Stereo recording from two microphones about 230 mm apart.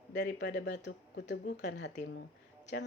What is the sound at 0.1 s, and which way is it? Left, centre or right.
Speech, left.